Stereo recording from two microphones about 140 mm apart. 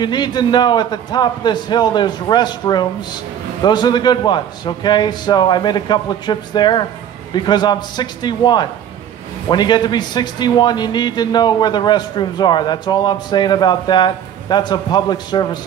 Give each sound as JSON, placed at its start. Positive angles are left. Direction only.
{"t": 0.0, "sound": "a man's voice", "side_deg": 30}